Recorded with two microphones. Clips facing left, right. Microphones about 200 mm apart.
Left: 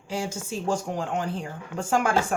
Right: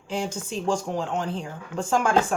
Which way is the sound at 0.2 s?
10° left (ahead or behind).